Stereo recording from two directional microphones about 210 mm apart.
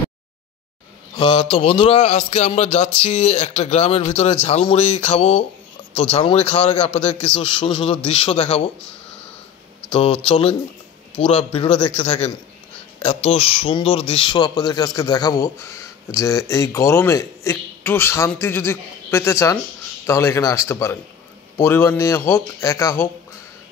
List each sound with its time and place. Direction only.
1.1 s speech: 20° left (ahead or behind)
10.2 s speech: 25° left (ahead or behind)